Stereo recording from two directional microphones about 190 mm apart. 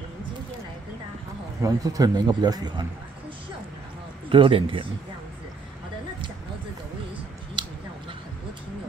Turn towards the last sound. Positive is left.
turn(degrees=-25)  # may be behind; listen again after turning